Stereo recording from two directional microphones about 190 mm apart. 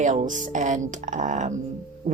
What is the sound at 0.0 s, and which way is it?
A woman's voice, 40° right (ahead or behind).